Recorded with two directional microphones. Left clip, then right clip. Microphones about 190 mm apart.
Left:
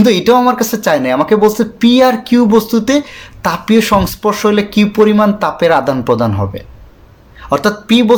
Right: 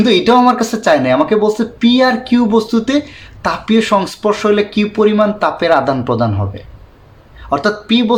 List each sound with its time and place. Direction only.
0.0 s speech: 35° left (ahead or behind)